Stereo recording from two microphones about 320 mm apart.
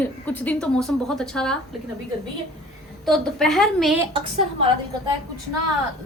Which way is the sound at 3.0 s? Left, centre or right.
Centre.